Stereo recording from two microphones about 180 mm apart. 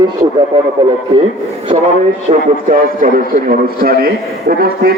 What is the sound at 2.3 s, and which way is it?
A man's voice, 40° right (ahead or behind).